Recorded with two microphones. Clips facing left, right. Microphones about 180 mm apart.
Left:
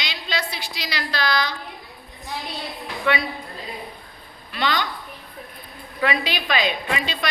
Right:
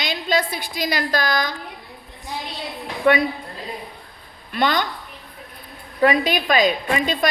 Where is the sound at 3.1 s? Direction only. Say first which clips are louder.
Right 6 dB; 45° right (ahead or behind).